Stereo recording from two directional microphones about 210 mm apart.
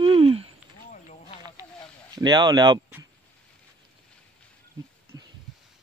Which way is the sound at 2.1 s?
20° right (ahead or behind).